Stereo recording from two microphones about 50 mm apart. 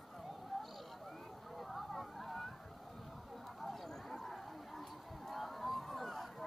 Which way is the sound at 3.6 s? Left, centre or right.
Centre.